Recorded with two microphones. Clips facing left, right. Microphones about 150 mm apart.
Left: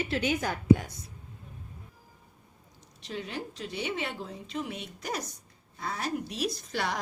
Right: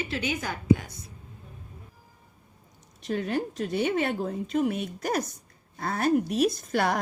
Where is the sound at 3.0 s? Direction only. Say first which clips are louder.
Right 9 dB; 50° right (ahead or behind).